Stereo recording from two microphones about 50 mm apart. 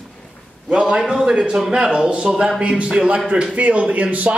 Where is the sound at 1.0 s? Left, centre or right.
Centre.